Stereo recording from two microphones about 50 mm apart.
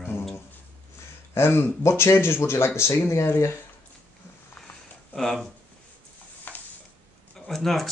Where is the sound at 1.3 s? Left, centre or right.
Left.